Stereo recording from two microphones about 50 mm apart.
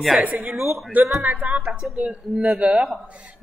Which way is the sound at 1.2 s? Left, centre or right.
Right.